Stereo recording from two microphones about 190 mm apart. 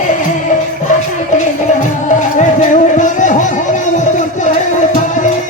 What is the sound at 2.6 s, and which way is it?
Music, 40° left (ahead or behind).